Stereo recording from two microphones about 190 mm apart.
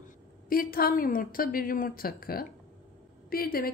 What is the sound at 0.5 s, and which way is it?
A woman's voice, 50° left (ahead or behind).